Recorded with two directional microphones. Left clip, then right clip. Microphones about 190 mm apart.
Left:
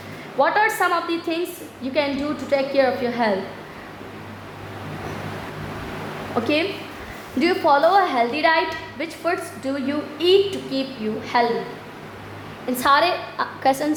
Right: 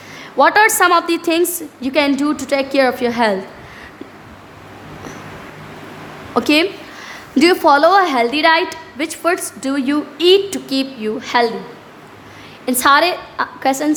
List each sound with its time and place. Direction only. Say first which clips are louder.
0.3 s a woman's voice: right 7 dB; 45° right (ahead or behind)
6.3 s a woman's voice: right 7 dB; 45° right (ahead or behind)
12.6 s a woman's voice: right 5 dB; 35° right (ahead or behind)